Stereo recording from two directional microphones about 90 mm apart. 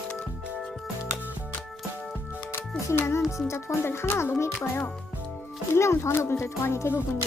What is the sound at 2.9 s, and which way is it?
A child's voice, 30° left (ahead or behind).